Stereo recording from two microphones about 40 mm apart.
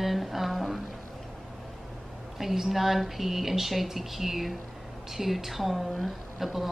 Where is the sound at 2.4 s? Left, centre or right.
Centre.